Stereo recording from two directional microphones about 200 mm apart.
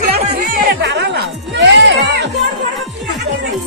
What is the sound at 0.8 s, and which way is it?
Music, 60° right (ahead or behind).